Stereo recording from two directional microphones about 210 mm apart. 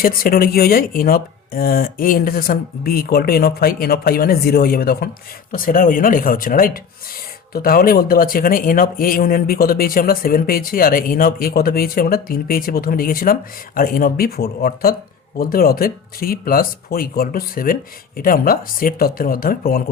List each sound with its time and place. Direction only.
0.0 s speech: 45° left (ahead or behind)